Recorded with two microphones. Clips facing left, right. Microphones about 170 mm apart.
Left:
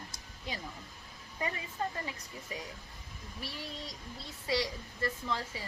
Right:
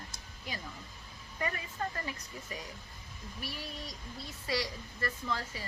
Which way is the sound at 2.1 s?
20° left (ahead or behind).